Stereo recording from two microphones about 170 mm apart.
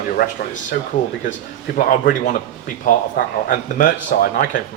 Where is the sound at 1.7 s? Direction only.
55° left (ahead or behind).